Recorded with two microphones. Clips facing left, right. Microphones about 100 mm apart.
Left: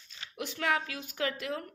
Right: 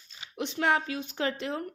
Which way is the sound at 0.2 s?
20° right (ahead or behind).